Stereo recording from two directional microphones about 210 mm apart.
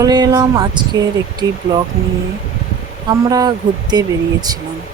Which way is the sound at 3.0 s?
20° right (ahead or behind).